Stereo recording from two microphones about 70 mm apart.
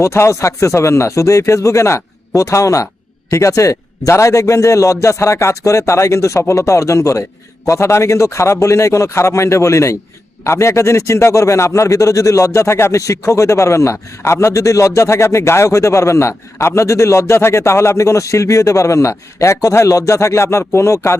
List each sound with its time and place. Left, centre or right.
0.0 s a man's voice: left